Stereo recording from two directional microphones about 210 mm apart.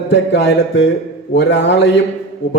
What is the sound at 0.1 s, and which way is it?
A man's voice, 60° left (ahead or behind).